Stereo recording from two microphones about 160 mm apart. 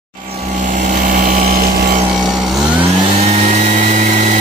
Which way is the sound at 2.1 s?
5° right (ahead or behind).